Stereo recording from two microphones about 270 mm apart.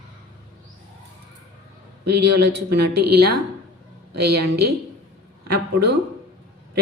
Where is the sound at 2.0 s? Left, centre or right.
Right.